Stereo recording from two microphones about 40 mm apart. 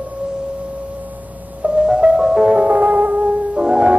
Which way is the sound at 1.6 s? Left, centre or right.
Centre.